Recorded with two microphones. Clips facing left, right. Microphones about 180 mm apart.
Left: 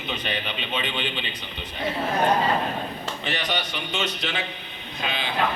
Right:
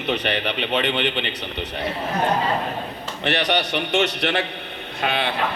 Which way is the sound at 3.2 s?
70° right (ahead or behind).